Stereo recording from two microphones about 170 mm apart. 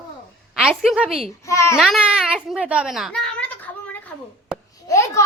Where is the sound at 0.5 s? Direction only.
5° right (ahead or behind).